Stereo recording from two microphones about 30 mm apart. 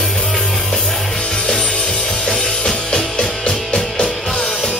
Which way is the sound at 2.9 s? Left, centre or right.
Left.